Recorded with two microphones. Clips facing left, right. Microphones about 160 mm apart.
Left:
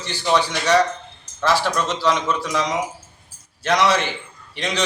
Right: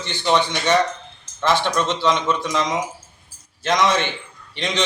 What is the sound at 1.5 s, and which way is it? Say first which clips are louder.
A man's voice: right 1 dB; 5° left (ahead or behind).